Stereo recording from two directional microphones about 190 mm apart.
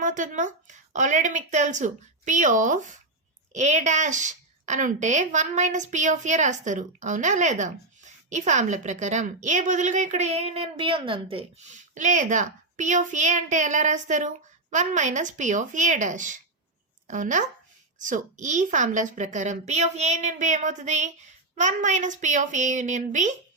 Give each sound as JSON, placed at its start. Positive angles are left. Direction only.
{"t": 0.0, "sound": "a woman's voice", "side_deg": -40}